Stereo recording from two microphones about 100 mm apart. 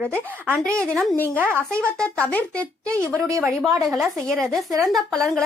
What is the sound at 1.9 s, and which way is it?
Speech, 10° left (ahead or behind).